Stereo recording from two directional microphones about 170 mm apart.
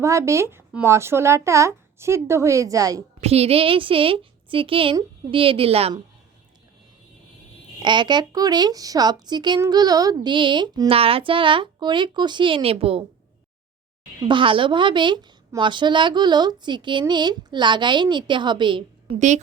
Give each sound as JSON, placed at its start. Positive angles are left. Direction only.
{"t": 0.0, "sound": "a child's voice", "side_deg": -15}
{"t": 3.2, "sound": "a woman's voice", "side_deg": -35}
{"t": 7.8, "sound": "speech", "side_deg": -25}
{"t": 14.3, "sound": "speech", "side_deg": -30}